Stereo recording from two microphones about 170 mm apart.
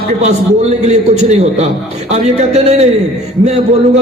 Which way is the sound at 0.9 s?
40° right (ahead or behind).